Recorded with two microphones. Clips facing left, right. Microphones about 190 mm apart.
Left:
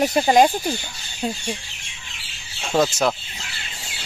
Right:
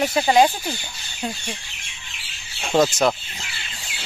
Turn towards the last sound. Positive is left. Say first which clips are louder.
# right 1 dB
turn(degrees=0)  # may be behind; listen again after turning